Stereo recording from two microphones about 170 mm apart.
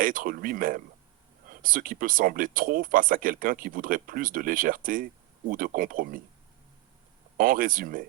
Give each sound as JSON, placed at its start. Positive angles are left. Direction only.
{"t": 0.0, "sound": "speech", "side_deg": -55}
{"t": 7.3, "sound": "speech", "side_deg": -55}